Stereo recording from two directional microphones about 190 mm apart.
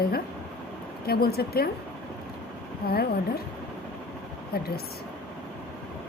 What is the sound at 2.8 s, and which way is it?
Speech, 50° left (ahead or behind).